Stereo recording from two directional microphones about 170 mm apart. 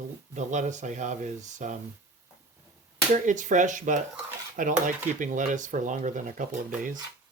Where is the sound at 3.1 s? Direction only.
45° right (ahead or behind).